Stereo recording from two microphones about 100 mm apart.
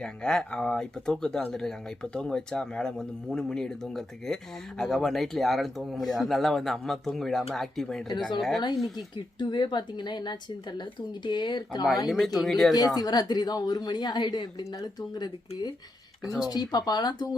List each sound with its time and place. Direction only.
0.0 s speech: 5° left (ahead or behind)
9.1 s a woman's voice: 50° left (ahead or behind)
12.0 s speech: centre (ahead or behind)
12.7 s a woman's voice: 40° left (ahead or behind)